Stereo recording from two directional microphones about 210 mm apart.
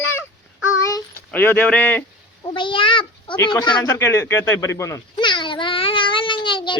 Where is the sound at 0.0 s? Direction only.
10° left (ahead or behind).